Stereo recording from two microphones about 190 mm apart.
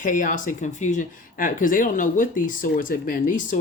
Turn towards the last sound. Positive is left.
turn(degrees=45)  # may be behind; listen again after turning